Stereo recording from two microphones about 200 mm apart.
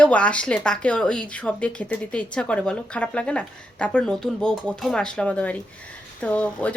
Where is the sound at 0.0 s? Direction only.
5° left (ahead or behind).